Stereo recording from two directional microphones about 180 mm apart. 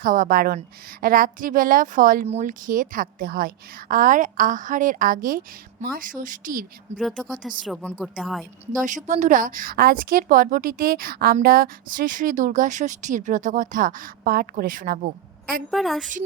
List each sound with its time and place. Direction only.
0.0 s a woman's voice: 50° right (ahead or behind)
2.2 s a woman's voice: 40° right (ahead or behind)
7.0 s a woman's voice: centre (ahead or behind)
9.0 s a woman's voice: 40° right (ahead or behind)
15.7 s a woman's voice: centre (ahead or behind)